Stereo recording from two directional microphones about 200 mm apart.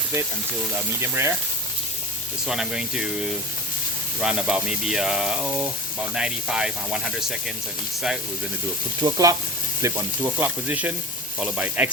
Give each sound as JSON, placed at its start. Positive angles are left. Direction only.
{"t": 0.9, "sound": "speech", "side_deg": -10}
{"t": 2.5, "sound": "speech", "side_deg": -5}
{"t": 9.0, "sound": "speech", "side_deg": -15}